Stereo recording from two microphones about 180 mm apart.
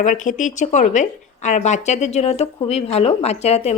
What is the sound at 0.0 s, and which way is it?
A woman's voice, 45° left (ahead or behind).